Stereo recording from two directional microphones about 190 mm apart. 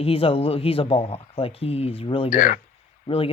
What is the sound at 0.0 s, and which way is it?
Speech, 30° left (ahead or behind).